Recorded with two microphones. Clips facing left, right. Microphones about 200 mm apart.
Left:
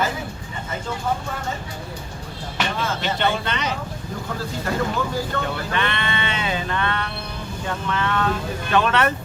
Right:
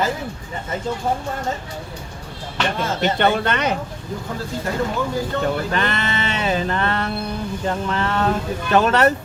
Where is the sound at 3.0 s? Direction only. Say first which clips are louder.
Right 7 dB; 50° right (ahead or behind).